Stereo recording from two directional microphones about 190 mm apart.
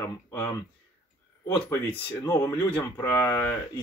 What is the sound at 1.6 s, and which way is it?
Speech, 15° left (ahead or behind).